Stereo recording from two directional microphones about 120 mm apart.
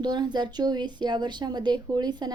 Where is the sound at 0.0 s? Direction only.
35° right (ahead or behind).